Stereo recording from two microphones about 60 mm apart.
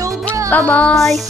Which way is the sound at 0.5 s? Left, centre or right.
Left.